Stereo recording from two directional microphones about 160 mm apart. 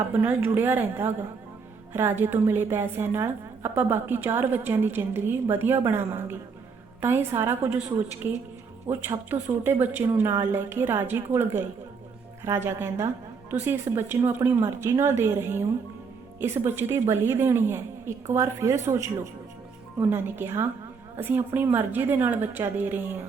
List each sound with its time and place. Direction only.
0.1 s a woman's voice: 10° right (ahead or behind)